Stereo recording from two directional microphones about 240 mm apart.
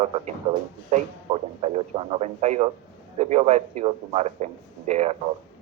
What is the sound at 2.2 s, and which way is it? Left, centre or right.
A man's voice, right.